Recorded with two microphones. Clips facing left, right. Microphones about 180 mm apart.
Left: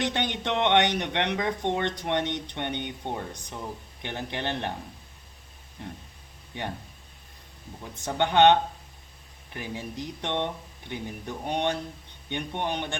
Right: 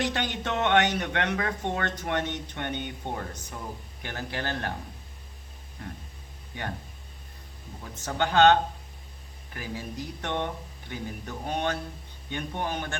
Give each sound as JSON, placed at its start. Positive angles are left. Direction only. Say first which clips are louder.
{"t": 0.0, "sound": "speech", "louder": "left 1 dB", "side_deg": 20}
{"t": 8.0, "sound": "speech", "louder": "left 1 dB", "side_deg": 20}
{"t": 9.6, "sound": "speech", "louder": "left 1 dB", "side_deg": 20}